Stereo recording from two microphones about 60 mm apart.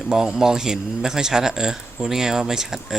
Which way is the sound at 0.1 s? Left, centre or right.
Centre.